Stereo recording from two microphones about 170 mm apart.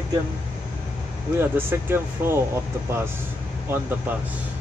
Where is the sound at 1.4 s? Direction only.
15° right (ahead or behind).